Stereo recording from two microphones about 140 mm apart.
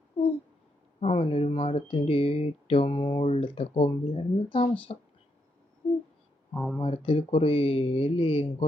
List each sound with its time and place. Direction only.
0.9 s speech: 40° left (ahead or behind)
3.2 s speech: 45° left (ahead or behind)
6.5 s speech: centre (ahead or behind)
6.7 s speech: 40° left (ahead or behind)